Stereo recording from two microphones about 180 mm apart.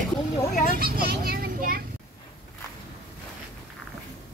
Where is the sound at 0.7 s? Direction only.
55° right (ahead or behind).